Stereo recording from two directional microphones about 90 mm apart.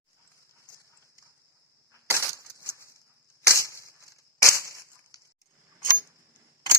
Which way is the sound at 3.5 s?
30° left (ahead or behind).